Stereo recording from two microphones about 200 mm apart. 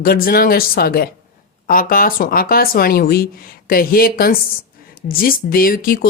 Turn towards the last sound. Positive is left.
turn(degrees=45)  # may be behind; listen again after turning